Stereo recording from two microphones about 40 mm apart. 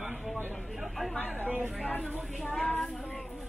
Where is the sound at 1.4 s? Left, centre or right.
Right.